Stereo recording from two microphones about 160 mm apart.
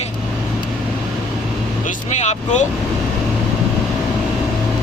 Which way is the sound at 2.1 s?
45° left (ahead or behind).